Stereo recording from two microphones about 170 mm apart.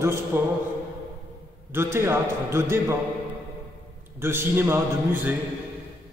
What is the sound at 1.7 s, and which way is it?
A man's voice, 15° right (ahead or behind).